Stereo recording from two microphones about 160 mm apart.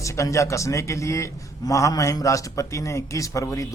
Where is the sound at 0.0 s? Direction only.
20° left (ahead or behind).